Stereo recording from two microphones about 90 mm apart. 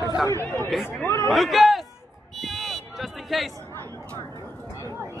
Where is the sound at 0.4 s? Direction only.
25° left (ahead or behind).